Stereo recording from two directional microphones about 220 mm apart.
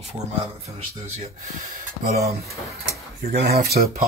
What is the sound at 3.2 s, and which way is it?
Speech, 45° right (ahead or behind).